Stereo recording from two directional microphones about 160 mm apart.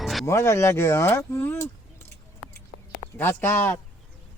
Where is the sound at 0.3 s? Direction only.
15° left (ahead or behind).